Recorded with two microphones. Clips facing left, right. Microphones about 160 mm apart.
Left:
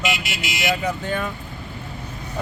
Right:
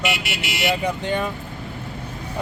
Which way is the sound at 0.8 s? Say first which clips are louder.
Right 1 dB; 20° right (ahead or behind).